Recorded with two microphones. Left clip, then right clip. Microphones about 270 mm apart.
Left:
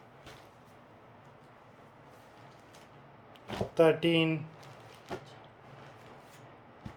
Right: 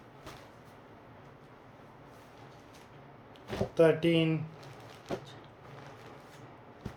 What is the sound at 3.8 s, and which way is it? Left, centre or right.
Speech, centre.